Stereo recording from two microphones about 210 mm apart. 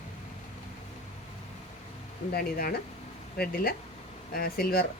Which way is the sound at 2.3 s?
45° left (ahead or behind).